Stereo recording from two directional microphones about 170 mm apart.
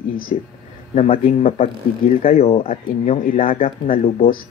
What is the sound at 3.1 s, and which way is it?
Speech, 50° left (ahead or behind).